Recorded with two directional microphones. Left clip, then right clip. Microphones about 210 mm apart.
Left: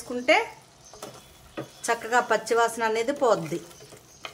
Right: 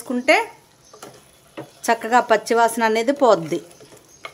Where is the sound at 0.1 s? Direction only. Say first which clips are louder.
Right 5 dB; 50° right (ahead or behind).